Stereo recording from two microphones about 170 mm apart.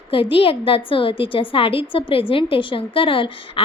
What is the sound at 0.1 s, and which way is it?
A woman's voice, 30° left (ahead or behind).